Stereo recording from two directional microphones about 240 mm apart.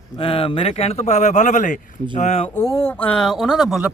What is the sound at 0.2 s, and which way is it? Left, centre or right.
Speech, left.